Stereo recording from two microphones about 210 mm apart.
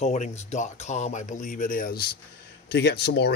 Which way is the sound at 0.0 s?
30° left (ahead or behind).